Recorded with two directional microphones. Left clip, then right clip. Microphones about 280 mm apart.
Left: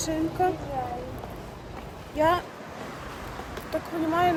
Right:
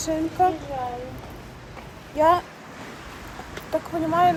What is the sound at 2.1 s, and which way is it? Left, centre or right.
Speech, centre.